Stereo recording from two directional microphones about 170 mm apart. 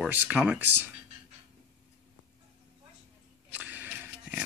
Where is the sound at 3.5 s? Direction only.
10° right (ahead or behind).